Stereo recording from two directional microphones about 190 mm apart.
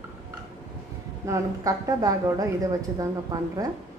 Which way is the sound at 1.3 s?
15° right (ahead or behind).